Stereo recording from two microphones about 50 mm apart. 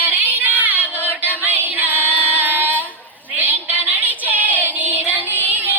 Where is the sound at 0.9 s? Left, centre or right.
Left.